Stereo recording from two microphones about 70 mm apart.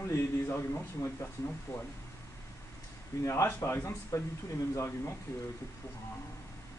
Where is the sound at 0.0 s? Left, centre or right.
Left.